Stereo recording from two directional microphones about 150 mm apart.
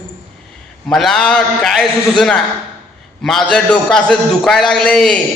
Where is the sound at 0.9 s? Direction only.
Centre (ahead or behind).